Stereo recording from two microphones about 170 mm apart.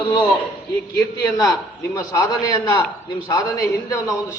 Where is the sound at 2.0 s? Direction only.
20° left (ahead or behind).